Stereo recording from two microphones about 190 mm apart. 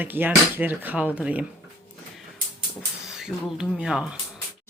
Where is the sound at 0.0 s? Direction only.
10° right (ahead or behind).